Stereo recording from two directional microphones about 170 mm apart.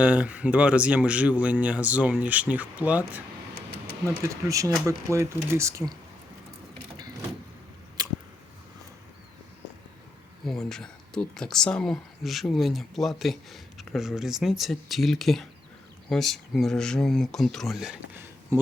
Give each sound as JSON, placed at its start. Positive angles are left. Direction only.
{"t": 0.0, "sound": "speech", "side_deg": -5}
{"t": 6.9, "sound": "power windows", "side_deg": -25}
{"t": 8.0, "sound": "a sound", "side_deg": -20}
{"t": 10.4, "sound": "speech", "side_deg": 0}